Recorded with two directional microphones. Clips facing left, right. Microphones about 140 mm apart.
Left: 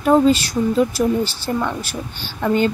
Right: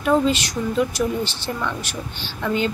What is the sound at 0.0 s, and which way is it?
Speech, 40° left (ahead or behind).